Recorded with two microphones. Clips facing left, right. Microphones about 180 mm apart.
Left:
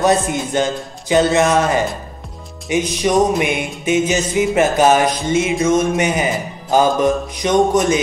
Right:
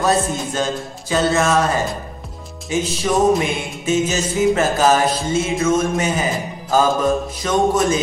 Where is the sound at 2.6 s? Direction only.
15° left (ahead or behind).